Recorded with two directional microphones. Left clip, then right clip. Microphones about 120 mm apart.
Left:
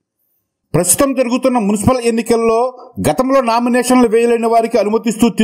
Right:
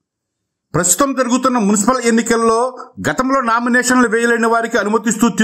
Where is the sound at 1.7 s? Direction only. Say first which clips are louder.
Even; 30° left (ahead or behind).